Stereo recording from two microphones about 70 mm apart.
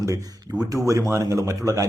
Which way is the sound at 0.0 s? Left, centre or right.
Right.